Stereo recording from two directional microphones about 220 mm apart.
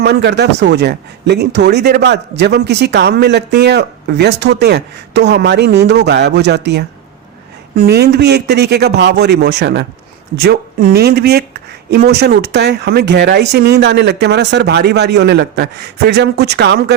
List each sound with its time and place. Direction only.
0.0 s a man's voice: 50° right (ahead or behind)